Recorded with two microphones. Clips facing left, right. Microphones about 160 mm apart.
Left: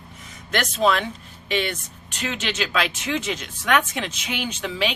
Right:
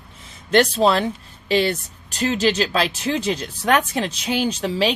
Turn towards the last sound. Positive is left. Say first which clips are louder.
# right 5 dB
turn(degrees=-35)  # may be behind; listen again after turning